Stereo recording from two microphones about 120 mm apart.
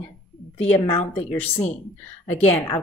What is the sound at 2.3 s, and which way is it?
Speech, 15° left (ahead or behind).